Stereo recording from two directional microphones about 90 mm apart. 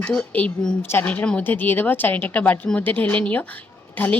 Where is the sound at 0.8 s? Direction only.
25° left (ahead or behind).